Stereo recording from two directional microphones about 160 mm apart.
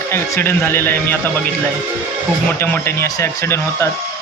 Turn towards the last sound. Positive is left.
turn(degrees=15)  # may be behind; listen again after turning